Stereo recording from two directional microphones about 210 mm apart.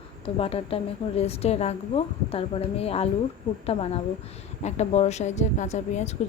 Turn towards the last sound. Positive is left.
turn(degrees=35)  # may be behind; listen again after turning